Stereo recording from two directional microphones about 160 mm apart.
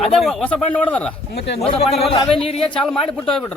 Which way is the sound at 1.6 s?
35° left (ahead or behind).